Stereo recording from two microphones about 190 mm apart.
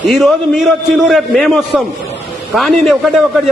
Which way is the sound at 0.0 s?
Centre (ahead or behind).